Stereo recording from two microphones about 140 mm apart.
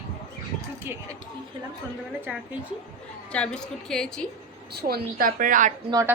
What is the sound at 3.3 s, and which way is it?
Speech, 5° left (ahead or behind).